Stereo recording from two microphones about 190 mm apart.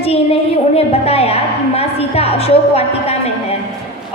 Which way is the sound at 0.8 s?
30° left (ahead or behind).